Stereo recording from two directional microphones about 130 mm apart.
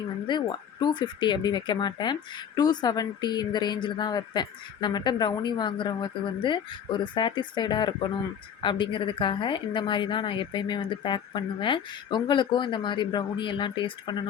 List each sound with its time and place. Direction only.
0.3 s a woman's voice: 35° left (ahead or behind)